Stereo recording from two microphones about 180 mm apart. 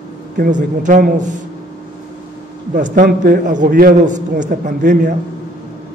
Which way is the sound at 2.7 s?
50° right (ahead or behind).